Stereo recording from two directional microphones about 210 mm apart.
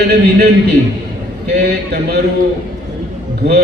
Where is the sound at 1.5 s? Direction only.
50° right (ahead or behind).